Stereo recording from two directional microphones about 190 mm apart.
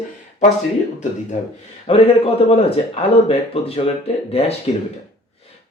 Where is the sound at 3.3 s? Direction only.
30° left (ahead or behind).